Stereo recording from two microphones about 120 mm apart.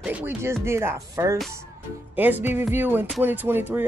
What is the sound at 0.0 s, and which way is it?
Speech, 10° right (ahead or behind).